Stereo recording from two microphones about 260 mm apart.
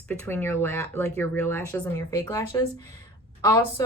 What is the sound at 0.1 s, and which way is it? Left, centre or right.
Speech, centre.